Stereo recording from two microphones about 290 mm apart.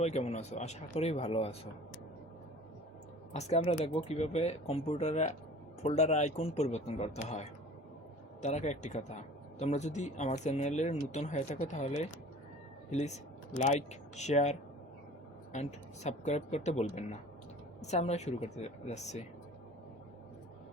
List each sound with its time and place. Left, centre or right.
0.0 s speech: left
3.3 s speech: left
15.5 s speech: left